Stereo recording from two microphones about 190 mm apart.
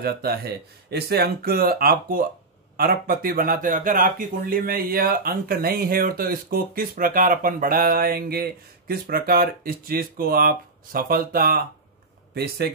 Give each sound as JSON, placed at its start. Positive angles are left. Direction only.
{"t": 0.0, "sound": "speech", "side_deg": -55}